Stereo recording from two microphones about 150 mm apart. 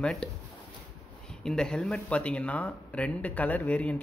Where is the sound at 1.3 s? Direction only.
5° left (ahead or behind).